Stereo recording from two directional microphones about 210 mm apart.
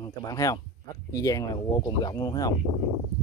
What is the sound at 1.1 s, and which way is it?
Speech, 15° left (ahead or behind).